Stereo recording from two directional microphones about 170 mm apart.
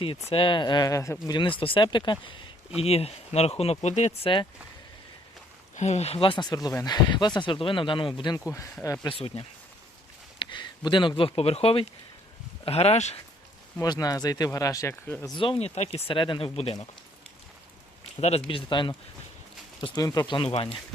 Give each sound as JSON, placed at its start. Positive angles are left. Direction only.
{"t": 0.3, "sound": "speech", "side_deg": 30}
{"t": 5.7, "sound": "speech", "side_deg": 40}
{"t": 9.1, "sound": "speech", "side_deg": 35}
{"t": 10.3, "sound": "a sound", "side_deg": 30}
{"t": 11.2, "sound": "speech", "side_deg": 35}
{"t": 13.8, "sound": "speech", "side_deg": 25}
{"t": 15.4, "sound": "speech", "side_deg": 35}
{"t": 18.2, "sound": "speech", "side_deg": 35}
{"t": 20.0, "sound": "speech", "side_deg": 20}